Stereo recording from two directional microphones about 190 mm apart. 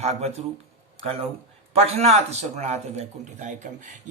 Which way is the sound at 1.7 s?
35° right (ahead or behind).